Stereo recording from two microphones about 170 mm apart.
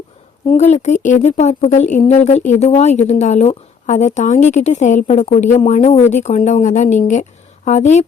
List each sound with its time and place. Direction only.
0.4 s speech: 40° left (ahead or behind)